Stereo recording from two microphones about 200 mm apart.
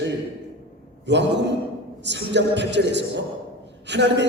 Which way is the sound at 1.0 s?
60° right (ahead or behind).